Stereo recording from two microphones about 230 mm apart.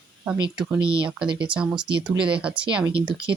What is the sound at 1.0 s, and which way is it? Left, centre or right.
Speech, centre.